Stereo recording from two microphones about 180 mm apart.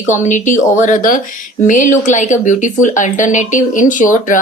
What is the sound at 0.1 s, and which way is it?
Speech, 45° left (ahead or behind).